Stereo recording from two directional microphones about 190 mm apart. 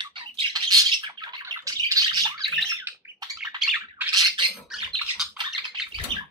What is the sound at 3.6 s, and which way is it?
Squawk, 5° right (ahead or behind).